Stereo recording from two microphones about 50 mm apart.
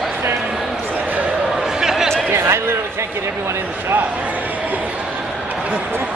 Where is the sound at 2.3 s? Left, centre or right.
Right.